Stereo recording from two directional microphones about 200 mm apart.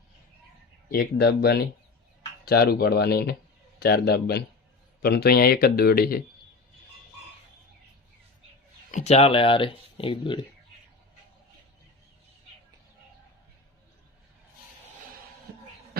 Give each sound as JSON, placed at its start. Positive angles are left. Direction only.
{"t": 0.9, "sound": "speech", "side_deg": 50}
{"t": 8.9, "sound": "speech", "side_deg": 35}